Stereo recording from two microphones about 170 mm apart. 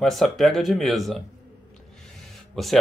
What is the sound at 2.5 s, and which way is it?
Speech, centre (ahead or behind).